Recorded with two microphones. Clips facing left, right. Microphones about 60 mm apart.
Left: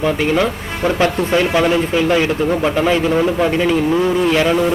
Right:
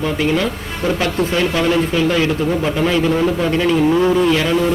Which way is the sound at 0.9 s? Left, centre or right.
Left.